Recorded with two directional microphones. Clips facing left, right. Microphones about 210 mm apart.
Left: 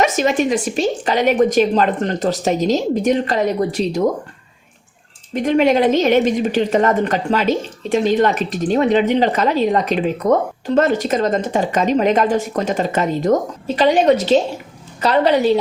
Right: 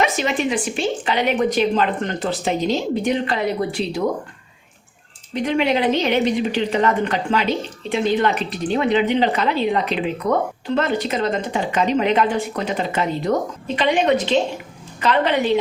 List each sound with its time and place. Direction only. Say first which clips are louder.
0.0 s a woman's voice: left 4 dB; 45° left (ahead or behind)
5.3 s a woman's voice: left 5 dB; 45° left (ahead or behind)